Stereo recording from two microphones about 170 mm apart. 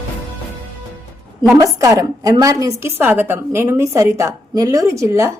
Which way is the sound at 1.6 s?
20° right (ahead or behind).